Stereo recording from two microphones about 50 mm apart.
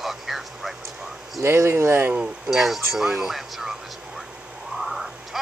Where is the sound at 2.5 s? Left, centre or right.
Centre.